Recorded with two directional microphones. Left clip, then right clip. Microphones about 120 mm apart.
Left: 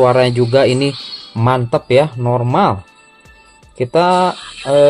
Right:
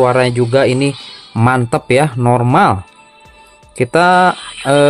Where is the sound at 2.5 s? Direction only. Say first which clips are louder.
Right 3 dB; 45° right (ahead or behind).